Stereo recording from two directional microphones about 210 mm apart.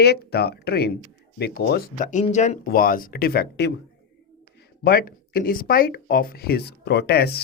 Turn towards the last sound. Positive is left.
turn(degrees=50)  # may be behind; listen again after turning